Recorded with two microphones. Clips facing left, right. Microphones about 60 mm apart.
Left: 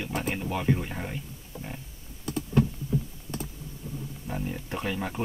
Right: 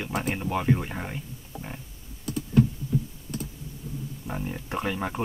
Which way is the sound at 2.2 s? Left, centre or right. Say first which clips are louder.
Right 2 dB; left.